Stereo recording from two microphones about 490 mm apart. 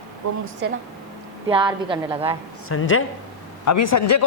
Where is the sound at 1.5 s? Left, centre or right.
Centre.